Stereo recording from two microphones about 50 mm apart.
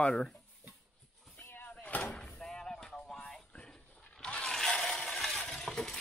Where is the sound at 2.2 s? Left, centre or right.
Centre.